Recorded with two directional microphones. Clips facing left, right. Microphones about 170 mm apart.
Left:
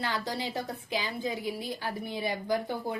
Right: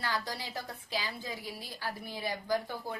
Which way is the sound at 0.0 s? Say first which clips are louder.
Left 4 dB; 25° left (ahead or behind).